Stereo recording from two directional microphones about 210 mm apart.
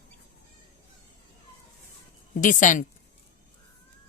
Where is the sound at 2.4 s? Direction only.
40° left (ahead or behind).